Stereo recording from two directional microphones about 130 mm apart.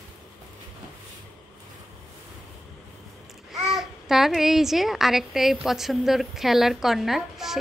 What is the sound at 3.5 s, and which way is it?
A child's voice, 5° right (ahead or behind).